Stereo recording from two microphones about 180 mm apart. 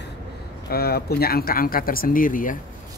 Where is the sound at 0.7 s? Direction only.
60° left (ahead or behind).